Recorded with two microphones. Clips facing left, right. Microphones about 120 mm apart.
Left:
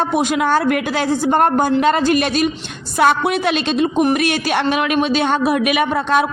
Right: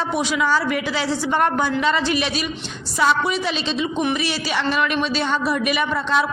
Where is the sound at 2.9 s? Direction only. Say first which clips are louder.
Left 4 dB; 60° left (ahead or behind).